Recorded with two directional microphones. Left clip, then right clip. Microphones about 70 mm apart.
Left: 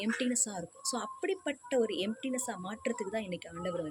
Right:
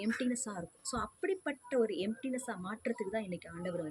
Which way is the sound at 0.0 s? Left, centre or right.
Right.